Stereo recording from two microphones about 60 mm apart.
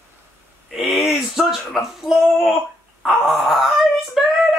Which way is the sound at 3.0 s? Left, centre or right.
Centre.